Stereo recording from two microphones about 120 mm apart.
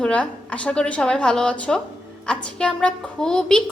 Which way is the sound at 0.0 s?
10° left (ahead or behind).